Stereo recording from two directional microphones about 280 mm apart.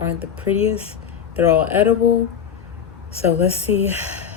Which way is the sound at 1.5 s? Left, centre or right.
Centre.